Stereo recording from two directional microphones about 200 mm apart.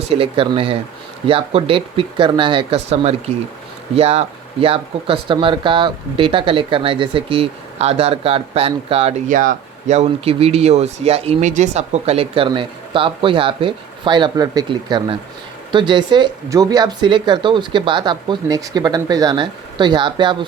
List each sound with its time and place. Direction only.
0.1 s speech: 25° right (ahead or behind)